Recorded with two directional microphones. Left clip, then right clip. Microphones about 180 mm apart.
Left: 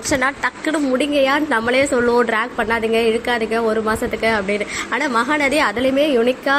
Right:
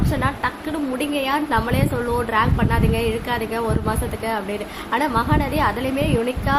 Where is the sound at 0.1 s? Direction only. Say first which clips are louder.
Left 7 dB; 20° left (ahead or behind).